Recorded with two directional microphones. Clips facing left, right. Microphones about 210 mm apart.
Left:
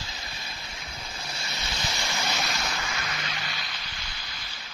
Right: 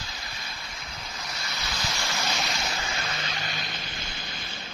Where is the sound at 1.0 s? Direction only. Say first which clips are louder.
Even; 30° left (ahead or behind).